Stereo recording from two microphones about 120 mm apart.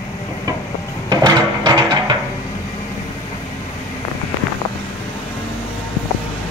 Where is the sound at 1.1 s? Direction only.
35° right (ahead or behind).